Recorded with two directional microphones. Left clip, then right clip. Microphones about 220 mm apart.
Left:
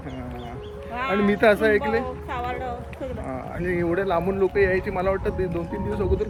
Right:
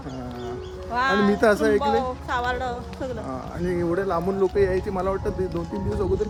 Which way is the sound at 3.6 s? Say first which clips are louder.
Left 1 dB; centre (ahead or behind).